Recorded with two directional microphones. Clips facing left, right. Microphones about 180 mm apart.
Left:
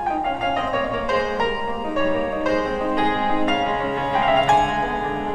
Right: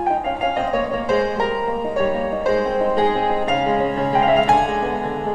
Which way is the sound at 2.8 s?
35° right (ahead or behind).